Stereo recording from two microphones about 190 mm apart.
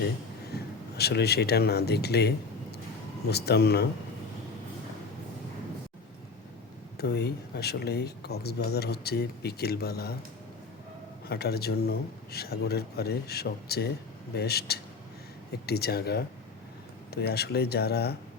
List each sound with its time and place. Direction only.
0.5 s speech: 60° left (ahead or behind)
6.9 s speech: 60° left (ahead or behind)
11.3 s speech: 55° left (ahead or behind)